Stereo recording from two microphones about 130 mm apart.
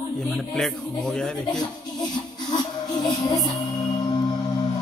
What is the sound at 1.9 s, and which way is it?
Music, 35° left (ahead or behind).